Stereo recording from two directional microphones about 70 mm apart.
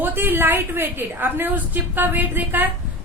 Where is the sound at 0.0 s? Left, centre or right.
Right.